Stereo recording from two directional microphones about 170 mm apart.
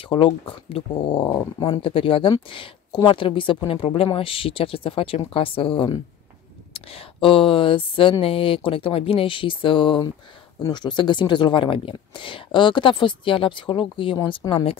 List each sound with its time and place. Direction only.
0.1 s speech: 30° left (ahead or behind)